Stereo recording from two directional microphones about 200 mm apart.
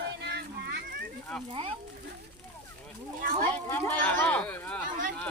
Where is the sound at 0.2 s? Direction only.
55° right (ahead or behind).